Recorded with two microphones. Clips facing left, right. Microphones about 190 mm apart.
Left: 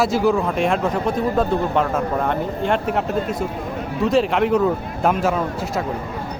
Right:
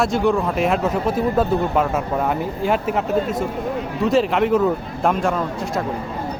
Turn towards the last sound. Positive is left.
turn(degrees=5)  # may be behind; listen again after turning